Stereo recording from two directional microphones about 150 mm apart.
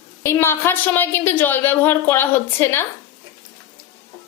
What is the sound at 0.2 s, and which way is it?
A woman's voice, 15° left (ahead or behind).